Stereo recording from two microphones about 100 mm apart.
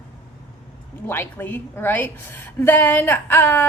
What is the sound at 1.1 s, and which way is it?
A woman's voice, 20° left (ahead or behind).